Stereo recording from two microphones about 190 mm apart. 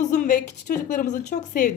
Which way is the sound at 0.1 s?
40° left (ahead or behind).